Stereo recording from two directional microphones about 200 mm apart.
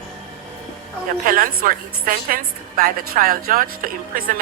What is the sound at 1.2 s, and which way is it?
A woman's voice, 45° right (ahead or behind).